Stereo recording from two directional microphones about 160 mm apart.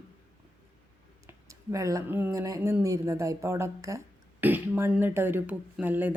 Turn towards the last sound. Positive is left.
turn(degrees=-10)  # may be behind; listen again after turning